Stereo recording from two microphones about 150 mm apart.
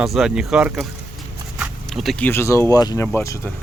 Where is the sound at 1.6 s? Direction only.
Centre (ahead or behind).